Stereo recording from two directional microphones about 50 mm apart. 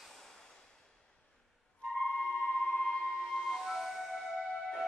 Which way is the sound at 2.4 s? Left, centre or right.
Centre.